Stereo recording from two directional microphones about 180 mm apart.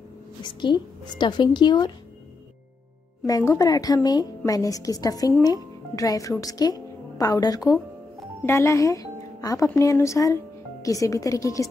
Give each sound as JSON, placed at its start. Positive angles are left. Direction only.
{"t": 0.4, "sound": "a woman's voice", "side_deg": 25}
{"t": 3.3, "sound": "a woman's voice", "side_deg": 20}